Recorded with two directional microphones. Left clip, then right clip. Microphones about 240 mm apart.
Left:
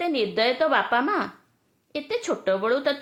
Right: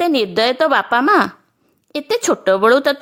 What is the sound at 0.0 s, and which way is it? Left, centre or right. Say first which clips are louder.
A woman's voice: right 8 dB; right.